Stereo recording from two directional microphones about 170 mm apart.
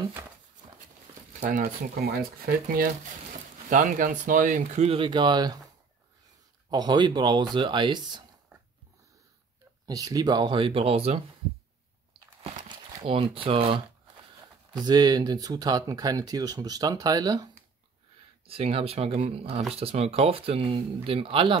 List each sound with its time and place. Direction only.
1.4 s speech: 50° right (ahead or behind)
3.7 s speech: 50° right (ahead or behind); by 5.6 s 25° right (ahead or behind)
6.7 s speech: 25° right (ahead or behind)
9.8 s speech: 20° right (ahead or behind)
12.4 s crumpling: 30° right (ahead or behind)
14.7 s speech: 25° right (ahead or behind)
18.5 s speech: 35° right (ahead or behind)